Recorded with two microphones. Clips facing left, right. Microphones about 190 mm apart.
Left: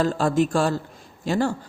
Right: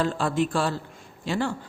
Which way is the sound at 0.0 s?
40° left (ahead or behind).